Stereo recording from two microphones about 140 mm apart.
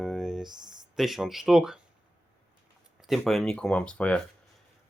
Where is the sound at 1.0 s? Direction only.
Centre (ahead or behind).